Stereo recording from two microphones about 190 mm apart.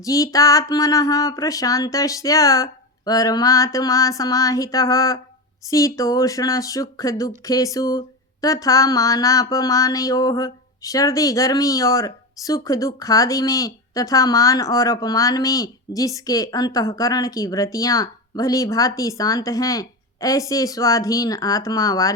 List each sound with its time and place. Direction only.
0.0 s speech: 15° left (ahead or behind)